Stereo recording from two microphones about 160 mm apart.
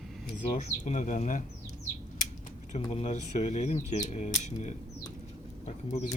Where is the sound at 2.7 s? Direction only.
40° left (ahead or behind).